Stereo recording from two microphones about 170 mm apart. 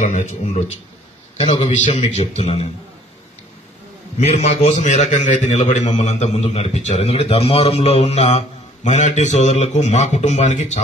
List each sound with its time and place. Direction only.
0.0 s a man's voice: 45° left (ahead or behind)
4.2 s a man's voice: 40° left (ahead or behind)